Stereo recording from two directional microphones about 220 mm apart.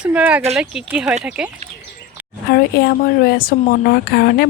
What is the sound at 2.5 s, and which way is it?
Speech, 45° left (ahead or behind).